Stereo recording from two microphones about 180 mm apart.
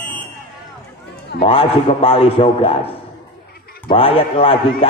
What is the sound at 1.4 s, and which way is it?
A man's voice, 30° left (ahead or behind).